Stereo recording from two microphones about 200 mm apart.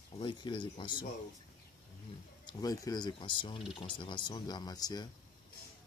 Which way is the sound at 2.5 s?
20° left (ahead or behind).